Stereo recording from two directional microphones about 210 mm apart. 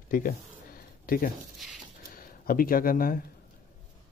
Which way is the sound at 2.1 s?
45° left (ahead or behind).